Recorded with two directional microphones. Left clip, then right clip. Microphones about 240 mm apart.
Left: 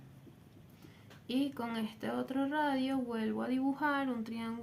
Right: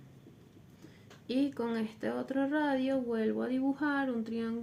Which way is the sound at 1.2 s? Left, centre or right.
Left.